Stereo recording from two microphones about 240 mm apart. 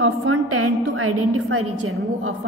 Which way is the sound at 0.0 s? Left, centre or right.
Right.